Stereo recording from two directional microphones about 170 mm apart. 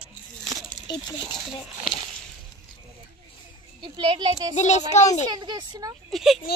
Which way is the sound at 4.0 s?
25° right (ahead or behind).